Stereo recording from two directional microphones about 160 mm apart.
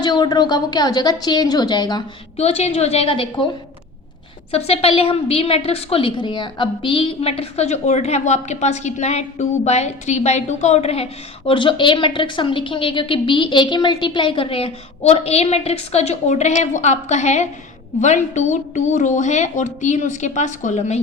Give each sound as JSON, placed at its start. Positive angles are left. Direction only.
{"t": 0.0, "sound": "a woman's voice", "side_deg": 25}
{"t": 2.3, "sound": "a woman's voice", "side_deg": 40}
{"t": 4.5, "sound": "a woman's voice", "side_deg": 40}